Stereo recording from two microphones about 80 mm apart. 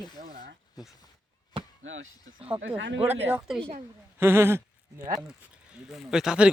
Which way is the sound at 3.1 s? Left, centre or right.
Right.